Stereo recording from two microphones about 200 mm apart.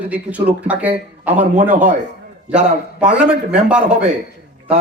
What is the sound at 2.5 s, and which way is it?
A man's voice, 5° right (ahead or behind).